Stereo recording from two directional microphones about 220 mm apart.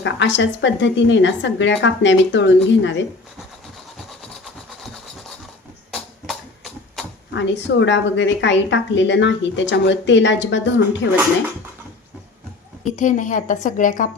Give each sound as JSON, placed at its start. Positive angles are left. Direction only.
{"t": 0.0, "sound": "a woman's voice", "side_deg": 55}
{"t": 7.3, "sound": "a woman's voice", "side_deg": 55}
{"t": 12.8, "sound": "a woman's voice", "side_deg": 35}